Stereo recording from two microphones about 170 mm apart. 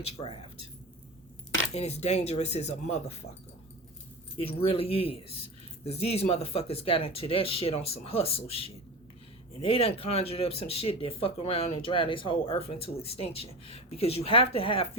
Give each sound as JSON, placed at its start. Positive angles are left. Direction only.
{"t": 0.2, "sound": "speech", "side_deg": 35}
{"t": 1.7, "sound": "speech", "side_deg": 40}
{"t": 4.4, "sound": "speech", "side_deg": 35}